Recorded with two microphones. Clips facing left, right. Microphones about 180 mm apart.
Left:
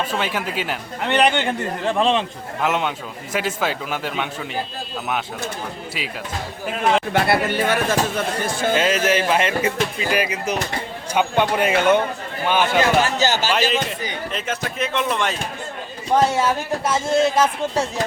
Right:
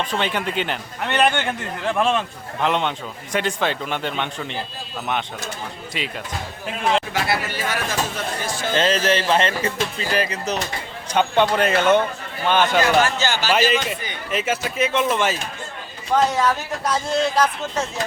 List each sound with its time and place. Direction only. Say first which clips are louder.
0.0 s speech: even; 5° left (ahead or behind)
2.1 s speech: left 2 dB; 5° left (ahead or behind)
6.0 s speech: right 3 dB; 5° left (ahead or behind)
7.1 s speech: left 5 dB; 55° left (ahead or behind)
8.7 s speech: even; 10° left (ahead or behind)
13.1 s speech: left 3 dB; 40° left (ahead or behind)
13.5 s speech: right 1 dB; 5° right (ahead or behind)
16.1 s speech: left 1 dB; 30° left (ahead or behind)